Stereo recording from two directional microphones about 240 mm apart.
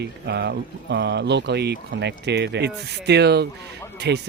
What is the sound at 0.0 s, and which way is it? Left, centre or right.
Speech, right.